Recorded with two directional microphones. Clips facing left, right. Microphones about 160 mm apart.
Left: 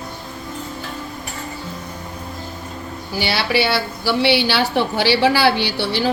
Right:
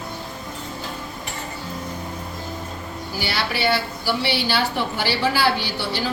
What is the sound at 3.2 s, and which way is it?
A woman's voice, 80° left.